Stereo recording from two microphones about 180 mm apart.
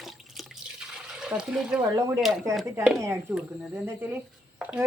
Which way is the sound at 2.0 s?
15° right (ahead or behind).